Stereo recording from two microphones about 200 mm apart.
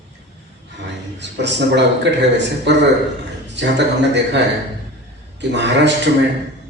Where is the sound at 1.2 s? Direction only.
60° right (ahead or behind).